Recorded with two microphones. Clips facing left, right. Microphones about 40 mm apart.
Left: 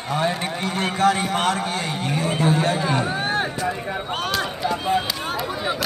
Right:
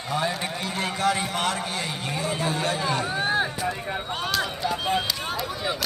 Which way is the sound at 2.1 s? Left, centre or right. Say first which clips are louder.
Left 6 dB; left.